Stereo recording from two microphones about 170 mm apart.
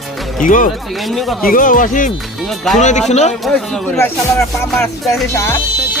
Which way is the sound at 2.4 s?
Centre (ahead or behind).